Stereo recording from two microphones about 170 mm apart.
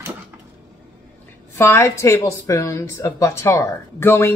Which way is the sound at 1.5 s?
15° left (ahead or behind).